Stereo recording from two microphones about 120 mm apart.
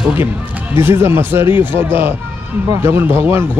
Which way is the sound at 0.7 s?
20° right (ahead or behind).